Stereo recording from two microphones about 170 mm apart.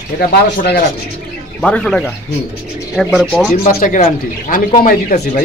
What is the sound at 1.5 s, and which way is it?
Speech, 5° left (ahead or behind).